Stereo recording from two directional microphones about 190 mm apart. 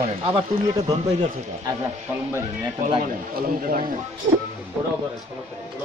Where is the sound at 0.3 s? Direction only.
30° right (ahead or behind).